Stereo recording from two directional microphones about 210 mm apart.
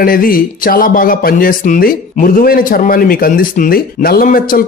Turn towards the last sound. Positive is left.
turn(degrees=45)  # may be behind; listen again after turning